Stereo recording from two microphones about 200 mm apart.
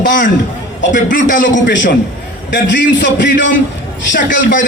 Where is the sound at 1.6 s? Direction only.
65° left (ahead or behind).